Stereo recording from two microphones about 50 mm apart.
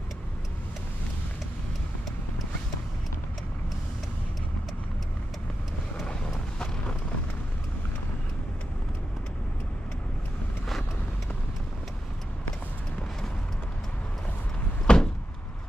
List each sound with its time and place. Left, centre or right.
14.9 s door: centre